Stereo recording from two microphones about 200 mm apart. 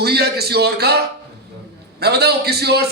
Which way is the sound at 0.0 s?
55° right (ahead or behind).